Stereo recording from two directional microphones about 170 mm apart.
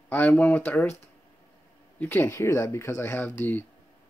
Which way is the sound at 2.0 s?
10° left (ahead or behind).